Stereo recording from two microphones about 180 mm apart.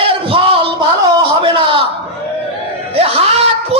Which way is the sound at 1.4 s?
30° right (ahead or behind).